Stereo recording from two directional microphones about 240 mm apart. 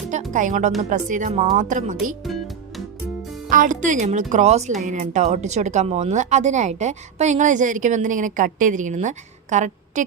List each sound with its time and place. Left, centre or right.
0.1 s speech: right
2.2 s music: centre
3.5 s speech: right